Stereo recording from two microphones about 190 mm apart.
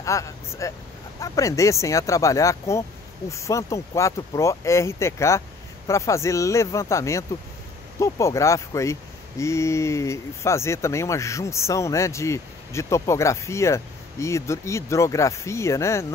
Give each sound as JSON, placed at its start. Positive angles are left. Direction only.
{"t": 0.0, "sound": "speech", "side_deg": 15}